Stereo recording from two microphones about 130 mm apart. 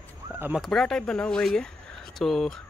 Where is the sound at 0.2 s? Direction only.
25° right (ahead or behind).